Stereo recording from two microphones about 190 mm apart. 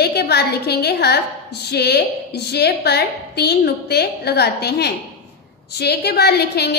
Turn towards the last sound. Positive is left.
turn(degrees=60)  # may be behind; listen again after turning